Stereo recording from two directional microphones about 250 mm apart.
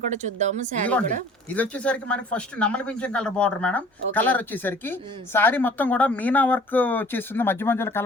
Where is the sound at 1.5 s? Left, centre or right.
Centre.